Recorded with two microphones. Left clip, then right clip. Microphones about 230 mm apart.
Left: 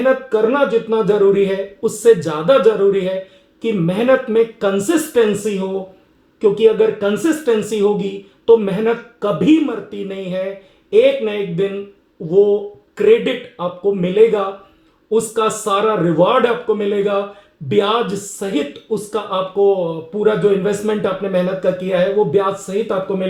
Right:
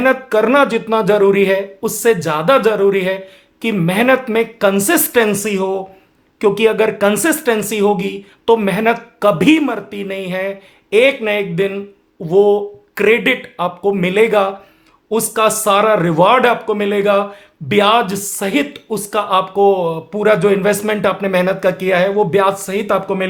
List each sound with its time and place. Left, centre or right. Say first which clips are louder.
0.3 s speech: right 3 dB; right
6.4 s speech: even; right